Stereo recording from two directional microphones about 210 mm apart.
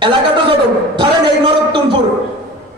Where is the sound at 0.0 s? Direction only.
20° right (ahead or behind).